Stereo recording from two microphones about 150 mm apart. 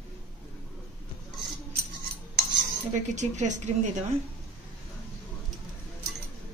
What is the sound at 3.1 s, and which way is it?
Speech, 55° right (ahead or behind).